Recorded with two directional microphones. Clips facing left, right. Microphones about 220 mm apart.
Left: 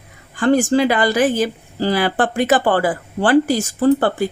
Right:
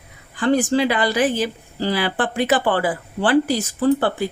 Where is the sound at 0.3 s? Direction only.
45° left (ahead or behind).